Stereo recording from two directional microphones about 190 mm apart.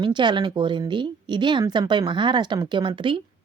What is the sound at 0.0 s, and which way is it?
Speech, 25° right (ahead or behind).